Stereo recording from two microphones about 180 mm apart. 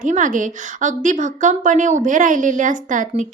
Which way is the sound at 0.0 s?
45° right (ahead or behind).